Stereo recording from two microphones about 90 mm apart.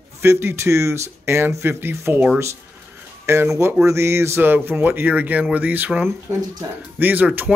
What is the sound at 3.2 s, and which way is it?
Speech, 30° right (ahead or behind).